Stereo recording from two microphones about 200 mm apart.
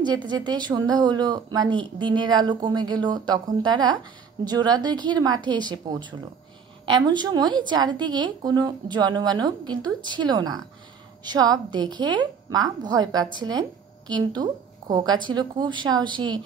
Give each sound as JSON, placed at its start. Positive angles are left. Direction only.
{"t": 0.0, "sound": "speech", "side_deg": -20}